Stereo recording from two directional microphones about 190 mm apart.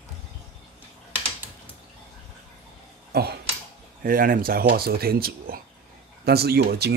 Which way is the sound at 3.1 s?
55° right (ahead or behind).